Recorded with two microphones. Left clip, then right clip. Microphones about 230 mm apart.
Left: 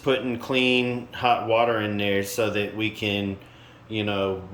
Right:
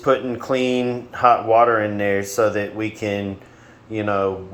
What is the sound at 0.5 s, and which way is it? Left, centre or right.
Speech, right.